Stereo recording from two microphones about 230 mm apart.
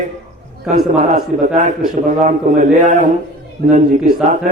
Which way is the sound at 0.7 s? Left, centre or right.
Right.